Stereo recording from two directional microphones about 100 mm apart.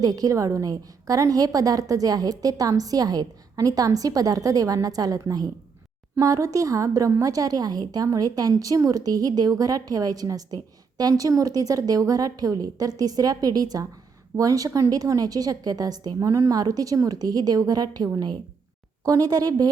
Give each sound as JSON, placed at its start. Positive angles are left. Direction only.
{"t": 0.0, "sound": "a woman's voice", "side_deg": -40}